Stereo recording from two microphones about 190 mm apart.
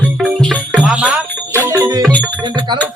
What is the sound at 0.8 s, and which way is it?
Music, 5° right (ahead or behind).